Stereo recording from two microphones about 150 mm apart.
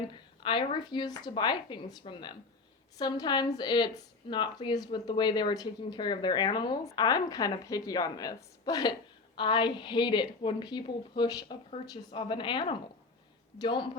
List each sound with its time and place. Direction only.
0.1 s a woman's voice: 35° left (ahead or behind)